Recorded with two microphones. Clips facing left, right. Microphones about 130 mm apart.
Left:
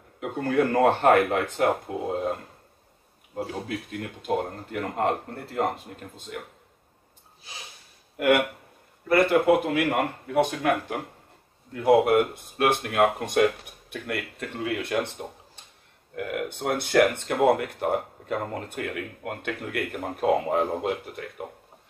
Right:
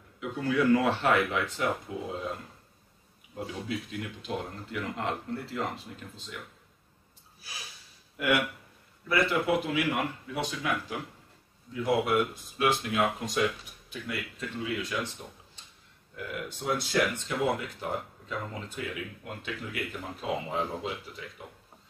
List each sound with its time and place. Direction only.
0.2 s speech: 50° left (ahead or behind)
7.5 s snort: 20° left (ahead or behind)
8.2 s speech: 50° left (ahead or behind)